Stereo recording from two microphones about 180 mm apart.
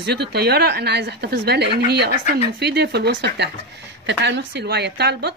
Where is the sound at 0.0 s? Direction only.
65° right (ahead or behind).